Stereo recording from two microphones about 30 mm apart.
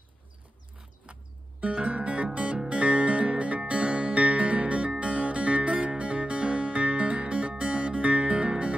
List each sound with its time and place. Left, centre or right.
1.1 s music: right